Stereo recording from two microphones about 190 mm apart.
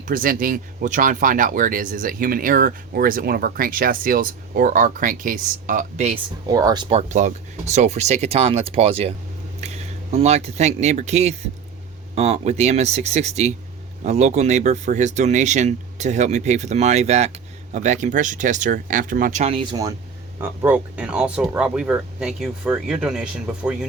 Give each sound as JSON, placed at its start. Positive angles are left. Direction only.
{"t": 0.1, "sound": "speech", "side_deg": -45}
{"t": 6.5, "sound": "speech", "side_deg": -20}
{"t": 7.1, "sound": "speech", "side_deg": -40}
{"t": 20.4, "sound": "speech", "side_deg": -10}